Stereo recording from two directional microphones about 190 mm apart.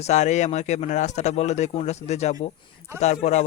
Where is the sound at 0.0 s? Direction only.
40° left (ahead or behind).